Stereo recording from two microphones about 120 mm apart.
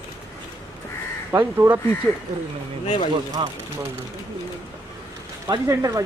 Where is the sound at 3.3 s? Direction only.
35° right (ahead or behind).